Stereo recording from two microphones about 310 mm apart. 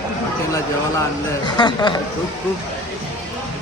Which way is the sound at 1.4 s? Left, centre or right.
Centre.